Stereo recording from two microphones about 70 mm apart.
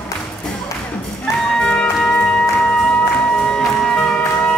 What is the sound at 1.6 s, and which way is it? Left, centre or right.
Music, centre.